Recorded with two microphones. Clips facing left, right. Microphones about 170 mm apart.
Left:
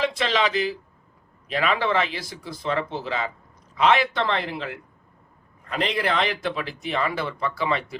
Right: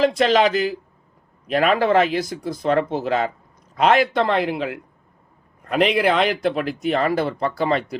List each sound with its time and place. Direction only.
0.0 s speech: 45° right (ahead or behind)